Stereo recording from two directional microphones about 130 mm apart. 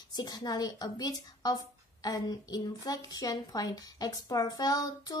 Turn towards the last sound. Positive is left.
turn(degrees=30)  # may be behind; listen again after turning